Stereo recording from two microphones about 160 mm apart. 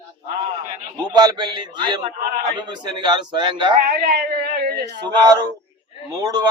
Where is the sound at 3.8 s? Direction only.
70° right (ahead or behind).